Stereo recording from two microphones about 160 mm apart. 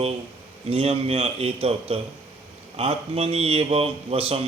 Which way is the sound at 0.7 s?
40° right (ahead or behind).